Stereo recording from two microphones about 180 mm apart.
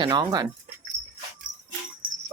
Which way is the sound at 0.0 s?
25° right (ahead or behind).